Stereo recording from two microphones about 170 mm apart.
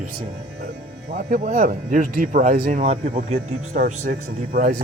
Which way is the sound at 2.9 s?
40° right (ahead or behind).